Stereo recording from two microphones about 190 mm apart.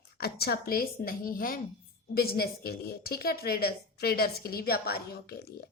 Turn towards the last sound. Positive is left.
turn(degrees=55)  # may be behind; listen again after turning